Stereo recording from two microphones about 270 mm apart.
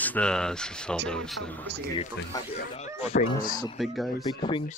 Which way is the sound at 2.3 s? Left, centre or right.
Centre.